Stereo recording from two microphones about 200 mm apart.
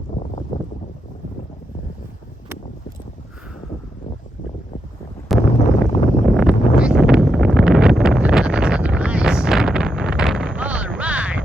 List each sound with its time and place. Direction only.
0.1 s boat: 35° left (ahead or behind)
5.3 s a sound: centre (ahead or behind)
5.8 s wind noise: centre (ahead or behind)